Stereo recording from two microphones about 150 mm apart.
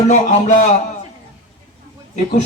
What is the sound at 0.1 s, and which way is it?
Speech, 50° left (ahead or behind).